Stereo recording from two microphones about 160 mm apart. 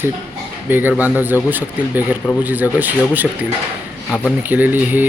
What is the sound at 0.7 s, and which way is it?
Speech, 10° right (ahead or behind).